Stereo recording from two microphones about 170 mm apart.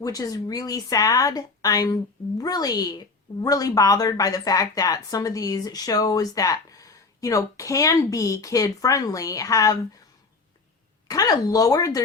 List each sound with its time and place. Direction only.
0.0 s a woman's voice: 20° left (ahead or behind)
11.1 s a woman's voice: 20° left (ahead or behind)